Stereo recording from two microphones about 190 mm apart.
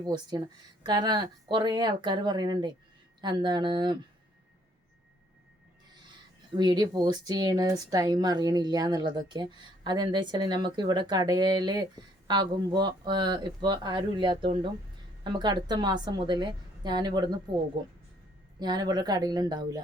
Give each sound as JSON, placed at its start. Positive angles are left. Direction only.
{"t": 0.0, "sound": "speech", "side_deg": -20}
{"t": 6.6, "sound": "speech", "side_deg": -20}
{"t": 18.6, "sound": "speech", "side_deg": -20}